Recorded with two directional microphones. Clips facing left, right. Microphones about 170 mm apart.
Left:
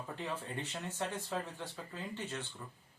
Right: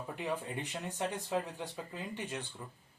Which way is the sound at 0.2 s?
15° right (ahead or behind).